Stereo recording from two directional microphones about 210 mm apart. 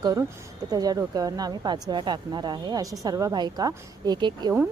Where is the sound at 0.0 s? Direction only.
15° right (ahead or behind).